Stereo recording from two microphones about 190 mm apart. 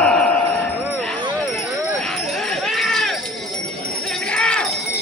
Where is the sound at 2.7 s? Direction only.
Centre (ahead or behind).